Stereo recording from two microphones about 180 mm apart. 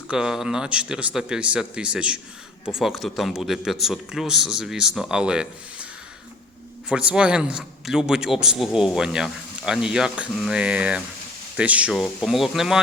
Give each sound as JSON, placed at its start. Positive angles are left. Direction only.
{"t": 0.1, "sound": "a man's voice", "side_deg": -5}